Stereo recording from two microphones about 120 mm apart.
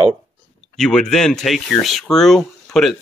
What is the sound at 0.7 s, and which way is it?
Speech, 5° left (ahead or behind).